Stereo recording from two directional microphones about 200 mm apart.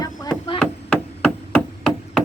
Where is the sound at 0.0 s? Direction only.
20° left (ahead or behind).